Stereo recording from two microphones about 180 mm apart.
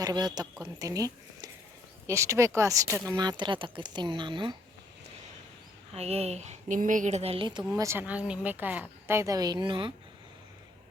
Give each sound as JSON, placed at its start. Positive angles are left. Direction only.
{"t": 0.0, "sound": "a woman's voice", "side_deg": -20}
{"t": 5.9, "sound": "speech", "side_deg": -35}
{"t": 7.7, "sound": "a woman's voice", "side_deg": -15}